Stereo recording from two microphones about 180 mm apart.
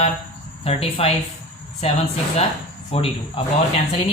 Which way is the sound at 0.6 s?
35° left (ahead or behind).